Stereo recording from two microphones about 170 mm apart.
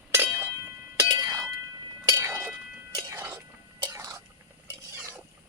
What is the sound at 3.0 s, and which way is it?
Whispering, 20° right (ahead or behind).